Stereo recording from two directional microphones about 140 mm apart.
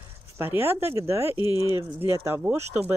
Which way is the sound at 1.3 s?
30° left (ahead or behind).